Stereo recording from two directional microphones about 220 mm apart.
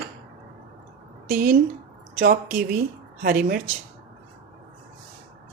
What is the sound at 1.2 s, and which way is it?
Speech, 40° right (ahead or behind).